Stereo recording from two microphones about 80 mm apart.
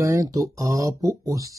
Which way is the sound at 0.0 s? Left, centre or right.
Right.